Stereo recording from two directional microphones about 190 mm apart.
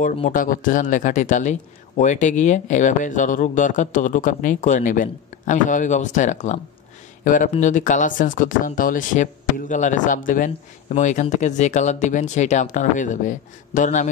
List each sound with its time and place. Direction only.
0.0 s speech: 45° left (ahead or behind)